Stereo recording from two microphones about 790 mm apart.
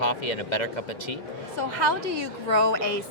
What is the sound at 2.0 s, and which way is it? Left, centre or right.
Speech, left.